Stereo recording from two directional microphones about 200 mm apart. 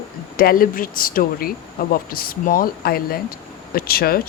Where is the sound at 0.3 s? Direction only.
45° left (ahead or behind).